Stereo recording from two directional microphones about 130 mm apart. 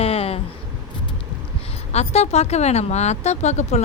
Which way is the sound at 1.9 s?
55° left (ahead or behind).